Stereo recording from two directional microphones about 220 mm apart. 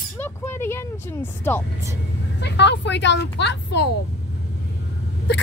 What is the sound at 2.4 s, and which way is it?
A woman's voice, 50° left (ahead or behind).